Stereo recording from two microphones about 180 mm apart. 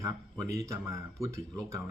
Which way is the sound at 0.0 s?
15° right (ahead or behind).